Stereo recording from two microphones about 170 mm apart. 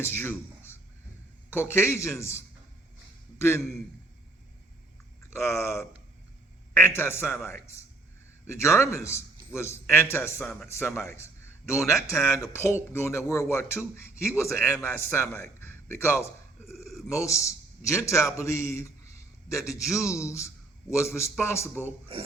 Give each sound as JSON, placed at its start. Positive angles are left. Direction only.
{"t": 0.0, "sound": "a man's voice", "side_deg": 15}
{"t": 5.3, "sound": "a man's voice", "side_deg": 15}